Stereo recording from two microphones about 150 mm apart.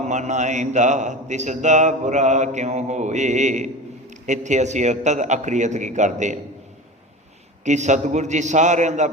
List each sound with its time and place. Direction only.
0.0 s a man's voice: 50° right (ahead or behind)
7.6 s a man's voice: 50° right (ahead or behind)